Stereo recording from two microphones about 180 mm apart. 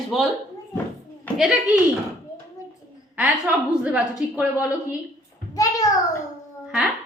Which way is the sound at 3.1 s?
10° right (ahead or behind).